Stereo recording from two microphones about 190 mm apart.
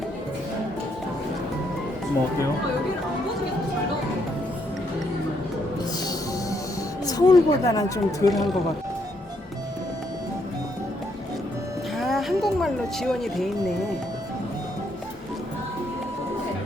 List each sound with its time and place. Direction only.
7.0 s speech: 20° left (ahead or behind)
11.9 s speech: centre (ahead or behind)